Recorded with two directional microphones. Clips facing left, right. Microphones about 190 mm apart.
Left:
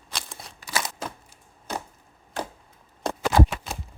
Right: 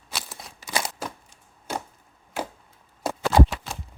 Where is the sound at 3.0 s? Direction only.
5° right (ahead or behind).